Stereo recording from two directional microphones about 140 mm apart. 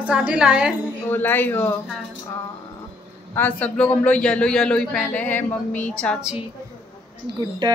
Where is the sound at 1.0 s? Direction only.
15° left (ahead or behind).